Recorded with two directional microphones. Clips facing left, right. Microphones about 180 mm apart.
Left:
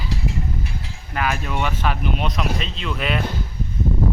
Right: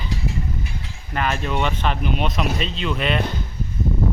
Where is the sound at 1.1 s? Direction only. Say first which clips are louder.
Right 1 dB; 5° left (ahead or behind).